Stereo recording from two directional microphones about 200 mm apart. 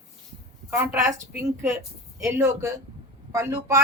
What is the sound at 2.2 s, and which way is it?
A woman's voice, 15° right (ahead or behind).